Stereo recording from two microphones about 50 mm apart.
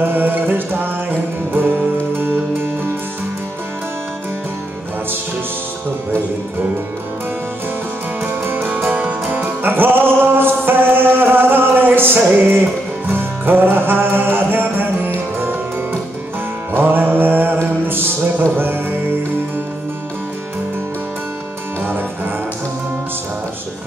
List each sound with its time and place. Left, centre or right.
0.0 s music: right
2.1 s music: right
8.7 s music: right